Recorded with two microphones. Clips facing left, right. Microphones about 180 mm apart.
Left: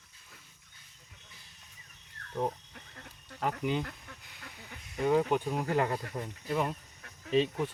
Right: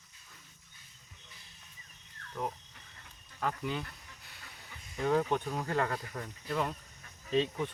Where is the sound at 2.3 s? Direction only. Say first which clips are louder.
Left 5 dB; 30° left (ahead or behind).